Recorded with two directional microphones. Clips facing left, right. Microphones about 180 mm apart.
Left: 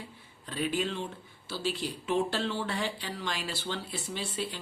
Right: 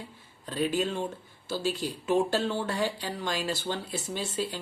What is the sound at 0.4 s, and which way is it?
Speech, 45° right (ahead or behind).